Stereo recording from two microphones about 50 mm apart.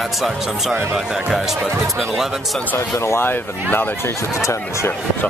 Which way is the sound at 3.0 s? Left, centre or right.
Left.